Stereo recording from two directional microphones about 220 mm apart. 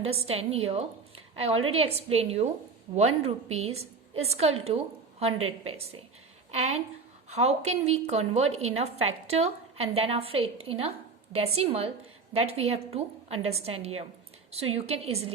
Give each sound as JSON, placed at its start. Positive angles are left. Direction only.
{"t": 0.0, "sound": "a woman's voice", "side_deg": -25}
{"t": 5.6, "sound": "a woman's voice", "side_deg": -25}